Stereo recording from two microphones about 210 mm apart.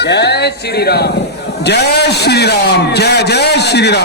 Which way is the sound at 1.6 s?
50° left (ahead or behind).